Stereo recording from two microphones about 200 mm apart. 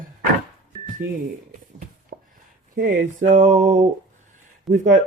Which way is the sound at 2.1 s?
45° right (ahead or behind).